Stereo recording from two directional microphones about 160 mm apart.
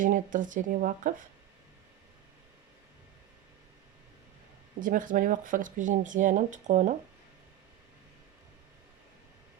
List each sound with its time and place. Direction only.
0.0 s speech: 55° right (ahead or behind)
4.8 s speech: 55° right (ahead or behind)